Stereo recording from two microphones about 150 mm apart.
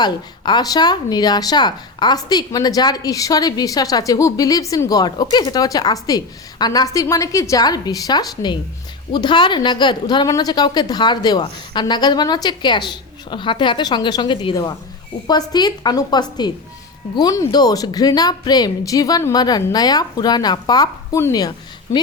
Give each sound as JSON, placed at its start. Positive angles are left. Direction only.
{"t": 0.0, "sound": "speech", "side_deg": 30}